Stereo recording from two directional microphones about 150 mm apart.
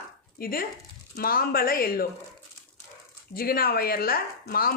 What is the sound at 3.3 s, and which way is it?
Speech, 80° left.